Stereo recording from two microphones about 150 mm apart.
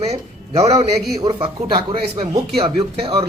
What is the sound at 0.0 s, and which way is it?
Speech, 45° right (ahead or behind).